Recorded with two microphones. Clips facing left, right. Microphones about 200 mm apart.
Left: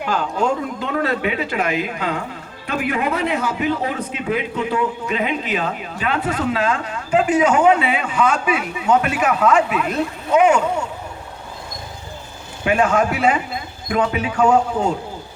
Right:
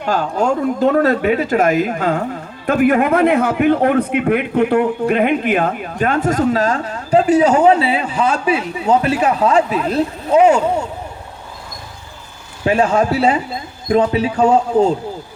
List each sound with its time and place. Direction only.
0.0 s a man's voice: 45° right (ahead or behind)
12.6 s a man's voice: 35° right (ahead or behind)